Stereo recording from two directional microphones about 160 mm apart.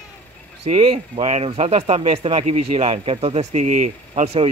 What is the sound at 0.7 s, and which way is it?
Speech, 40° right (ahead or behind).